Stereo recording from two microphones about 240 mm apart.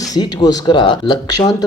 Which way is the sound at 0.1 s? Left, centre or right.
Centre.